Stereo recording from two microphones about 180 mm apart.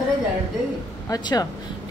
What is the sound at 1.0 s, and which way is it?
Speech, 20° left (ahead or behind).